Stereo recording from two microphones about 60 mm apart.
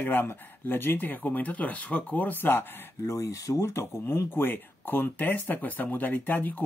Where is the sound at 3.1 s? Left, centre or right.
Left.